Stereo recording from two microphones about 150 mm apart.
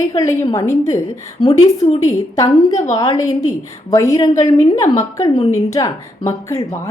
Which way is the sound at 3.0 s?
25° left (ahead or behind).